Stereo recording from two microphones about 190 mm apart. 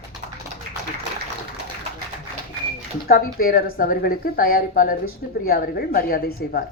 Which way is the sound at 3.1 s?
50° left (ahead or behind).